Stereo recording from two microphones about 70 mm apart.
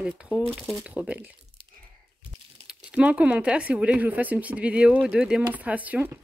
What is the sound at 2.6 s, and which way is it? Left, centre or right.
Speech, centre.